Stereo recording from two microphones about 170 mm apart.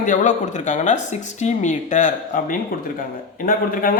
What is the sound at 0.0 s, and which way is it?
A woman's voice, 50° left (ahead or behind).